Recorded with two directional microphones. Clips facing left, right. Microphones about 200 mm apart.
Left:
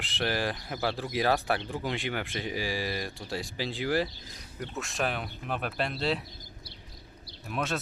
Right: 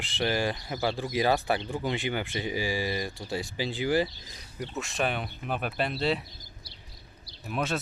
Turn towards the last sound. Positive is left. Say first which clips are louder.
# right 2 dB
turn(degrees=0)  # may be behind; listen again after turning